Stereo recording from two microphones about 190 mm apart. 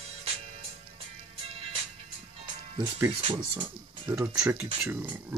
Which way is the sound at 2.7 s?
15° right (ahead or behind).